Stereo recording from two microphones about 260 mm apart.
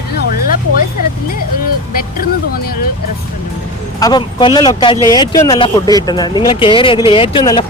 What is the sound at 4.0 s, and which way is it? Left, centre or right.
Speech, centre.